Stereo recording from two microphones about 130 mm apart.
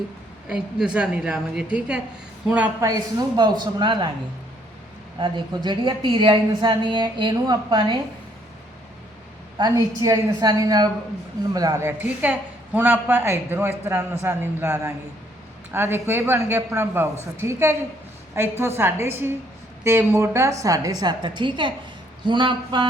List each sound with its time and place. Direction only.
0.4 s a woman's voice: 5° right (ahead or behind)
2.8 s speech: 30° right (ahead or behind)
5.2 s speech: 35° right (ahead or behind)
9.6 s a woman's voice: 30° right (ahead or behind)
11.9 s a woman's voice: 10° right (ahead or behind); by 22.9 s 35° right (ahead or behind)